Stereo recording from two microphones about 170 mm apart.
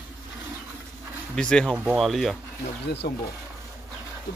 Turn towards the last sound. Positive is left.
turn(degrees=70)  # may be behind; listen again after turning